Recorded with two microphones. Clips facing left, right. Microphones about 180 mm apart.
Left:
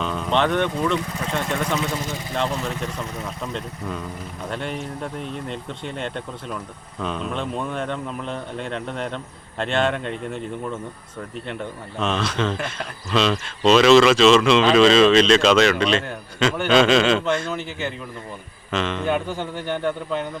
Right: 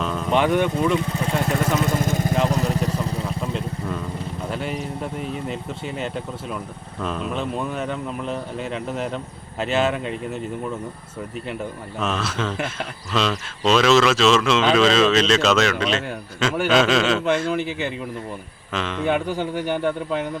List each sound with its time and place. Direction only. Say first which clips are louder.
0.0 s speech: right 1 dB; centre (ahead or behind)
1.8 s vehicle: right 5 dB; 50° right (ahead or behind)
2.5 s vehicle: right 5 dB; 40° right (ahead or behind)
3.4 s speech: right 3 dB; 5° right (ahead or behind)
11.9 s speech: left 2 dB; 5° right (ahead or behind)